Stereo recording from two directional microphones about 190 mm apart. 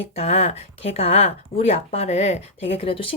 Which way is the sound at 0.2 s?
35° left (ahead or behind).